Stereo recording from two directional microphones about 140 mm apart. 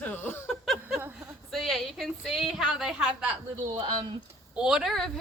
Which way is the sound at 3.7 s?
40° right (ahead or behind).